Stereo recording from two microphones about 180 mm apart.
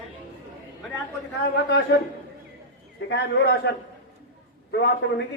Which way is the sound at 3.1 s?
70° left (ahead or behind).